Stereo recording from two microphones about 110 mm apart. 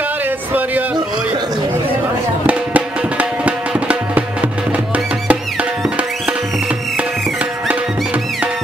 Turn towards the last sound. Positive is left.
turn(degrees=-10)  # may be behind; listen again after turning